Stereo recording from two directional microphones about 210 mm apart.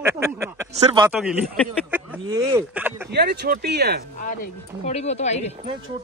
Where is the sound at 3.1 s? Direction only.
50° right (ahead or behind).